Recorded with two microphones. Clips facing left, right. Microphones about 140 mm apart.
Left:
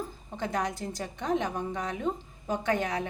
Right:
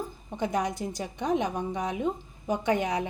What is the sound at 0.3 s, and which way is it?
A woman's voice, 15° right (ahead or behind).